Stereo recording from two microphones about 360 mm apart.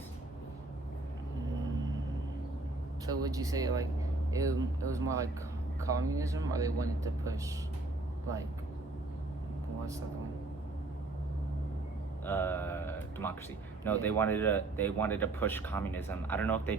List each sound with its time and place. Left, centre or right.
3.1 s speech: centre
12.2 s a sound: centre
13.8 s speech: centre